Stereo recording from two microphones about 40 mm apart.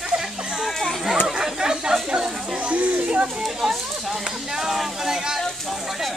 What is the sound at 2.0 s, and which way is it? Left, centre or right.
Children playing, right.